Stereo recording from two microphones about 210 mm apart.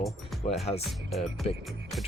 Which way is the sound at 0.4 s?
35° left (ahead or behind).